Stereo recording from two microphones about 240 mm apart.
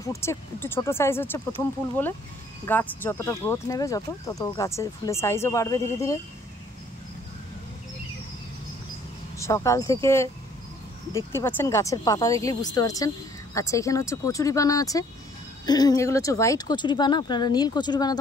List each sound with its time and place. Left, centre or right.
0.0 s speech: centre
9.4 s speech: centre